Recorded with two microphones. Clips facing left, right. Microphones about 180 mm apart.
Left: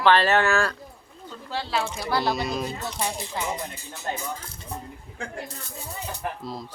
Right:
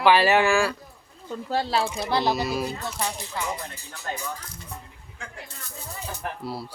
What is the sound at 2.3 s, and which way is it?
Speech, 5° right (ahead or behind).